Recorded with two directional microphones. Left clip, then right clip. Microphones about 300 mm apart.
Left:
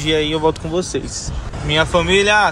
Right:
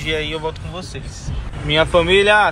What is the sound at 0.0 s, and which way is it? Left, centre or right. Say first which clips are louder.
Speech: left 6 dB; centre.